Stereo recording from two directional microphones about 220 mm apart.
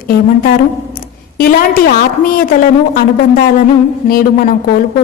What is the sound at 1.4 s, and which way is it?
A woman's voice, 40° left (ahead or behind).